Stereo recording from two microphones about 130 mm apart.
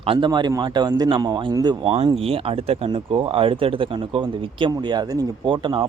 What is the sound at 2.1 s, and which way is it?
Speech, 45° right (ahead or behind).